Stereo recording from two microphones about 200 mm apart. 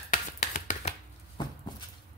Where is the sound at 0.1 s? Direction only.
35° left (ahead or behind).